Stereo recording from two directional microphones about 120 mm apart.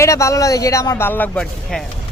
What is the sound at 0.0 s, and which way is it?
A man's voice, 25° left (ahead or behind).